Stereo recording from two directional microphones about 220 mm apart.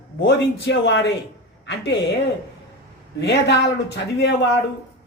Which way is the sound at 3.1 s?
50° left (ahead or behind).